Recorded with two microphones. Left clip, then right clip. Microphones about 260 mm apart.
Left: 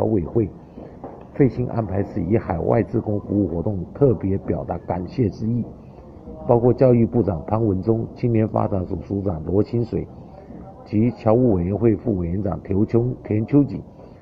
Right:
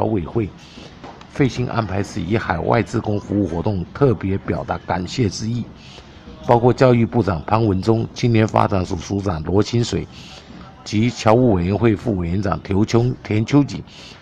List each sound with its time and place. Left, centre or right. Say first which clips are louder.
0.0 s speech: even; right
2.9 s speech: right 1 dB; right
10.9 s speech: right 1 dB; right
11.2 s speech: right 4 dB; right